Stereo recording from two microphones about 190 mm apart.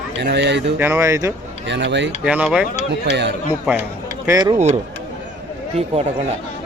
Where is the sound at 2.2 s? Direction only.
5° right (ahead or behind).